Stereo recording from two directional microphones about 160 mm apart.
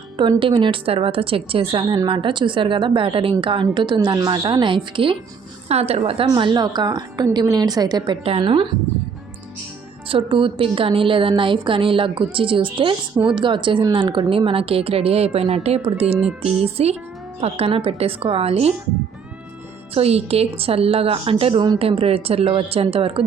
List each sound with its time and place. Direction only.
0.2 s a woman's voice: 30° right (ahead or behind)
10.1 s speech: 35° right (ahead or behind)
19.9 s speech: 40° right (ahead or behind)